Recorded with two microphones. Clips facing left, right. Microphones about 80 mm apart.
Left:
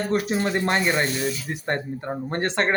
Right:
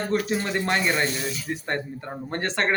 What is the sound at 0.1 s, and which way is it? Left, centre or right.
Speech, left.